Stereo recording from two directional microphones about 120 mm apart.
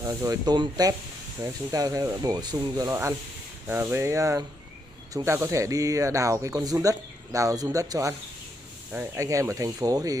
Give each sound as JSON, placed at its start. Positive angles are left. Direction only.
{"t": 0.0, "sound": "speech", "side_deg": -30}
{"t": 2.9, "sound": "speech", "side_deg": -25}